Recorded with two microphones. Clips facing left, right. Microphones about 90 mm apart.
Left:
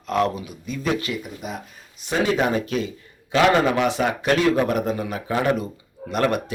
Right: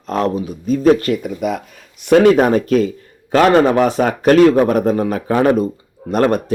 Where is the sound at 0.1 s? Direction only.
35° right (ahead or behind).